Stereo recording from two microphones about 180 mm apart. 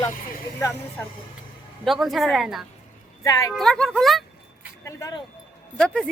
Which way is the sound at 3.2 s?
20° left (ahead or behind).